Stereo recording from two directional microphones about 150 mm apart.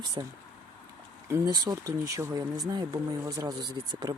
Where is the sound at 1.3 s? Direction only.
20° right (ahead or behind).